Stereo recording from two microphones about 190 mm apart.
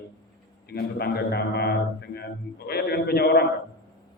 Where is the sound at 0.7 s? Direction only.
55° left (ahead or behind).